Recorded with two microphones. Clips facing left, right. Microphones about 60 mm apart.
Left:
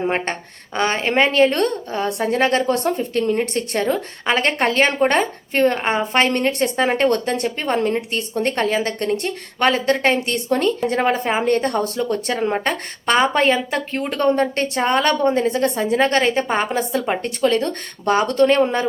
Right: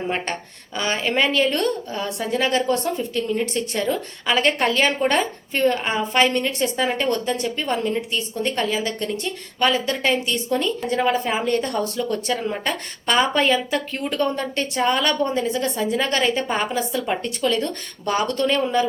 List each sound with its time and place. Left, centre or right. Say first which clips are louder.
0.8 s a woman's voice: left 4 dB; left